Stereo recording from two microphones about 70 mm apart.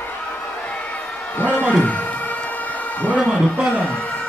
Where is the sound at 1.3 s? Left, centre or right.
Left.